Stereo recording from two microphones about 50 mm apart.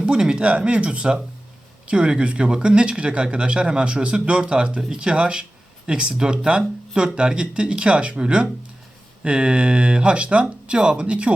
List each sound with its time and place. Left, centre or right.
0.0 s speech: centre